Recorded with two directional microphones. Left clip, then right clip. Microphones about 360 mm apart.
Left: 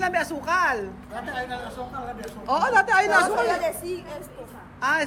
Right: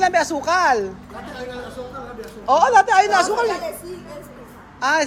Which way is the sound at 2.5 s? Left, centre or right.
Centre.